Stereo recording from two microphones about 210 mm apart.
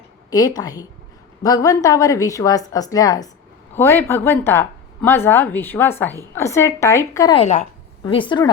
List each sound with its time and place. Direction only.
0.3 s a woman's voice: 15° left (ahead or behind)
7.3 s a woman's voice: 30° left (ahead or behind)